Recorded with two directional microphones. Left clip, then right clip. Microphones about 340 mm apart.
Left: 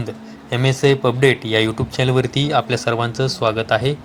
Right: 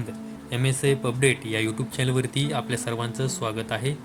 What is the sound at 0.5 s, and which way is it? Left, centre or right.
A man's voice, right.